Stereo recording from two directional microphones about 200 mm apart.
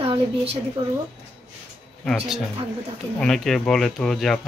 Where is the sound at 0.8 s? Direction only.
25° right (ahead or behind).